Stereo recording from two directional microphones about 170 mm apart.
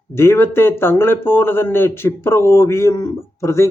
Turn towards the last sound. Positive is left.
turn(degrees=15)  # may be behind; listen again after turning